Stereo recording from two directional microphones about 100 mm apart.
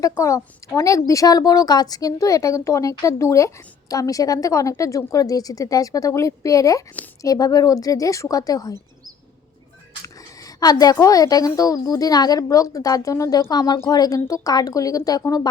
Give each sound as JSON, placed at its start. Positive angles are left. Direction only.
{"t": 0.0, "sound": "speech", "side_deg": 35}
{"t": 10.0, "sound": "speech", "side_deg": 40}